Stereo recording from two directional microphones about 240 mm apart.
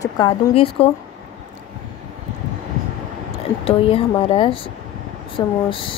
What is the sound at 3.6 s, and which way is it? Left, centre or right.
Speech, left.